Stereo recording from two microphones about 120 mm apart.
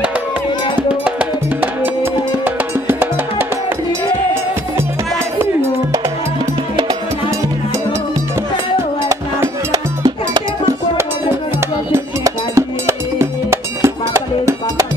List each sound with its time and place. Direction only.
2.4 s music: 15° right (ahead or behind)
9.1 s music: 30° right (ahead or behind)
11.9 s music: 25° right (ahead or behind)